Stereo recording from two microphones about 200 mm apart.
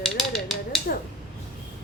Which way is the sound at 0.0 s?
Centre (ahead or behind).